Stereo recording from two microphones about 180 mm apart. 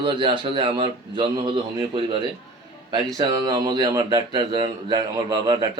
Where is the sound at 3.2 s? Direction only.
20° right (ahead or behind).